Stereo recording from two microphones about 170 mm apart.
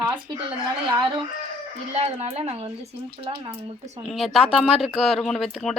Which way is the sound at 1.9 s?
40° right (ahead or behind).